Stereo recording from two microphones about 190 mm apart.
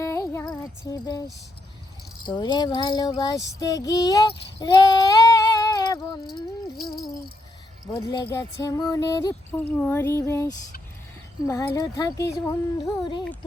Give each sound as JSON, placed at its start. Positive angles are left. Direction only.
{"t": 0.0, "sound": "music", "side_deg": 15}
{"t": 2.2, "sound": "speech", "side_deg": 25}
{"t": 3.2, "sound": "female singing", "side_deg": 20}
{"t": 6.7, "sound": "rattle", "side_deg": 0}
{"t": 7.9, "sound": "speech", "side_deg": 20}
{"t": 9.6, "sound": "female singing", "side_deg": 10}
{"t": 11.4, "sound": "speech", "side_deg": 20}